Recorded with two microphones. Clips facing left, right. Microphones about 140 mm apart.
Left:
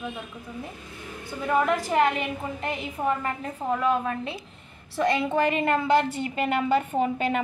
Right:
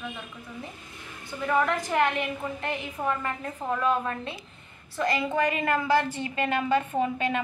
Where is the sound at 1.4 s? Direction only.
10° left (ahead or behind).